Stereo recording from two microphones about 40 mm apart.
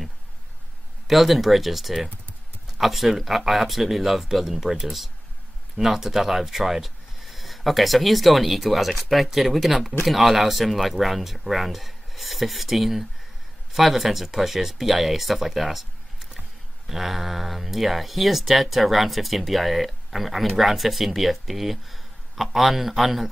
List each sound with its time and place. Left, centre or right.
1.0 s speech: centre